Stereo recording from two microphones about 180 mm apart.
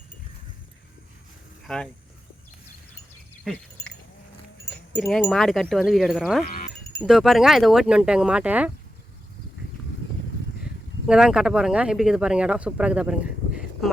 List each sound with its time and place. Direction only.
1.6 s speech: 5° left (ahead or behind)
3.5 s speech: 5° right (ahead or behind)
4.9 s speech: 5° left (ahead or behind)
6.4 s sheep: 50° left (ahead or behind)
7.1 s speech: centre (ahead or behind)
11.0 s speech: 5° right (ahead or behind)